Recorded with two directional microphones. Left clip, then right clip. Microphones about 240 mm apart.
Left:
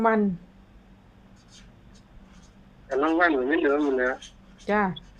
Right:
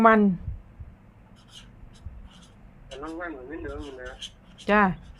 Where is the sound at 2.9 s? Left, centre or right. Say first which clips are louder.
Left 14 dB; left.